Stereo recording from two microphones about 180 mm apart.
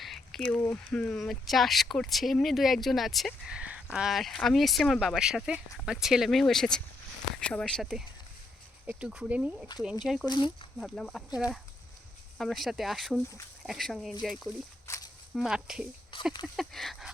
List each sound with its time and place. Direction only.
0.0 s speech: centre (ahead or behind)
10.2 s speech: 25° left (ahead or behind)
10.8 s speech: centre (ahead or behind)
14.8 s walk: 15° left (ahead or behind)
15.4 s speech: 5° right (ahead or behind)
16.1 s speech: 30° left (ahead or behind)
16.6 s speech: centre (ahead or behind)